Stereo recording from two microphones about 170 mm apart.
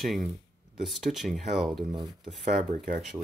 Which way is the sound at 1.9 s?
25° right (ahead or behind).